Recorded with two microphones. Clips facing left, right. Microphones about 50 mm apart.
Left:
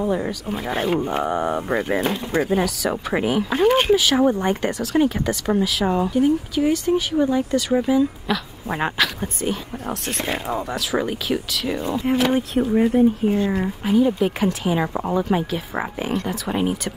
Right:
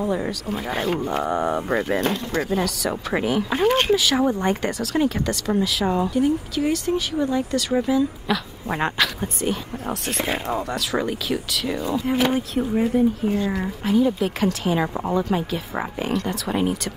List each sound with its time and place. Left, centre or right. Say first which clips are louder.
0.0 s speech: left 1 dB; centre
1.0 s speech: left 1 dB; centre
8.3 s speech: even; centre
12.9 s speech: left 2 dB; left
13.3 s speech: left 3 dB; centre